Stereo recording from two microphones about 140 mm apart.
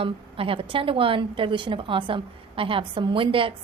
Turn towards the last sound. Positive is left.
turn(degrees=-40)  # may be behind; listen again after turning